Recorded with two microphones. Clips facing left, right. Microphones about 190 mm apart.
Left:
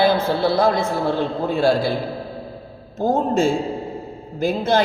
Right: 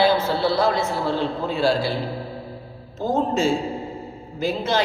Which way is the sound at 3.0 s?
50° left (ahead or behind).